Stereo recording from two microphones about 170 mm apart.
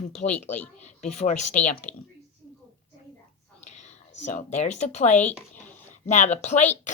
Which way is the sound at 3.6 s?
40° left (ahead or behind).